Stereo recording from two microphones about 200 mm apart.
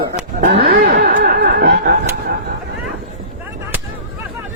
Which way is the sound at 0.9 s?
50° right (ahead or behind).